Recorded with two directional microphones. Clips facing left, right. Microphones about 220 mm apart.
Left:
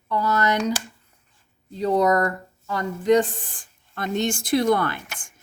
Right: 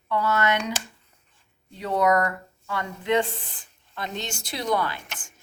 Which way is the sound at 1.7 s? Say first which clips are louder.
Left 3 dB; 35° left (ahead or behind).